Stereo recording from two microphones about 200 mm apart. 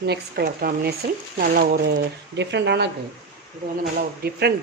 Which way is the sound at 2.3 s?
60° right (ahead or behind).